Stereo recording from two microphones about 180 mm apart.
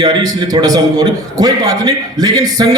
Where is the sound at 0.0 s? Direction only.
20° right (ahead or behind).